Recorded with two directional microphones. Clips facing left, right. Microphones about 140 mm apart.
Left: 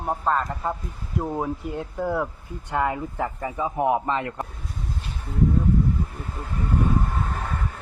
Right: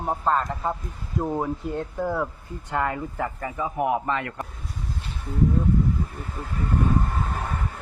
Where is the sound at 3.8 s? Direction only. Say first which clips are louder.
Left 2 dB; 25° left (ahead or behind).